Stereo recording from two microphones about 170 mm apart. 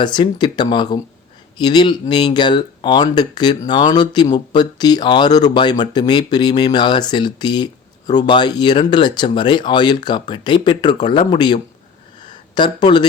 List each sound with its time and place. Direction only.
0.0 s speech: 25° left (ahead or behind)